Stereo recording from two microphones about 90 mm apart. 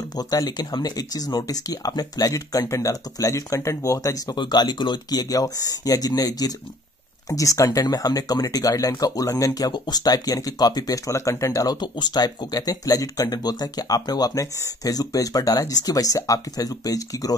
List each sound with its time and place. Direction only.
0.1 s speech: 45° left (ahead or behind)
4.4 s speech: 55° left (ahead or behind)